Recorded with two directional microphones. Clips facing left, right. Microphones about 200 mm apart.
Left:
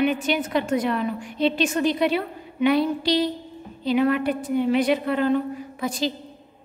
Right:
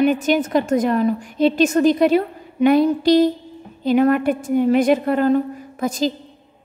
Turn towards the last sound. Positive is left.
turn(degrees=-45)  # may be behind; listen again after turning